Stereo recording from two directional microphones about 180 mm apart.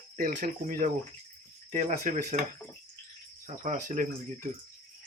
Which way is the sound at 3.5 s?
45° right (ahead or behind).